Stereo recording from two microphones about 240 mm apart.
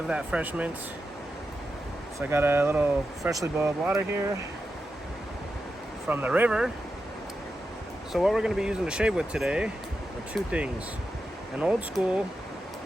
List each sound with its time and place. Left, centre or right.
0.1 s speech: centre
2.3 s speech: centre
6.1 s speech: centre
8.1 s speech: centre